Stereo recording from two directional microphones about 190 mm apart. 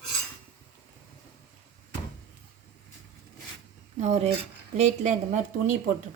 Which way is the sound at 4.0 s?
35° right (ahead or behind).